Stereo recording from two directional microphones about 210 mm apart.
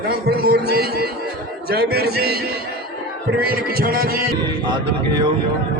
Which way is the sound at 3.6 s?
45° right (ahead or behind).